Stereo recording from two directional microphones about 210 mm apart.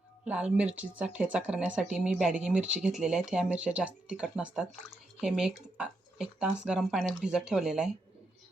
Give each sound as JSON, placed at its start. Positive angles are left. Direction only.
{"t": 0.3, "sound": "speech", "side_deg": -5}